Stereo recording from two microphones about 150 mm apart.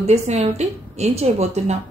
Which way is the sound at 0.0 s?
45° right (ahead or behind).